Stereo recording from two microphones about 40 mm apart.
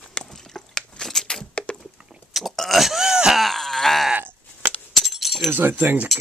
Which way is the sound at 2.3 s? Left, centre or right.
Centre.